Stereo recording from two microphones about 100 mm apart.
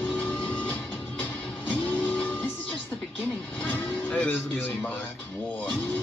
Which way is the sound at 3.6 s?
15° left (ahead or behind).